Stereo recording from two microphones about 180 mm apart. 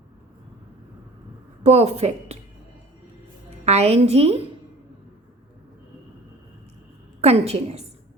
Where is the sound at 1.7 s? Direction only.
35° right (ahead or behind).